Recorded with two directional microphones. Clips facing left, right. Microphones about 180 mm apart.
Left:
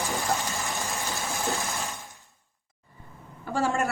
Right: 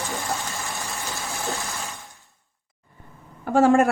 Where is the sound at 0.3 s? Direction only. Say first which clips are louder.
Even; centre (ahead or behind).